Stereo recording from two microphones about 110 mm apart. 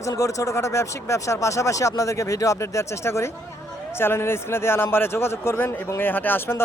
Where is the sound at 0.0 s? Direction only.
30° left (ahead or behind).